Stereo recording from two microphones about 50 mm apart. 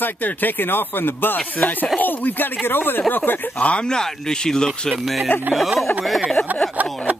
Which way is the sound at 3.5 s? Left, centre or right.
Left.